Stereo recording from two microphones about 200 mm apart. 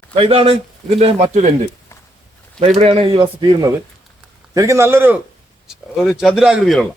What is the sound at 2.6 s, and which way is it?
Speech, 30° right (ahead or behind).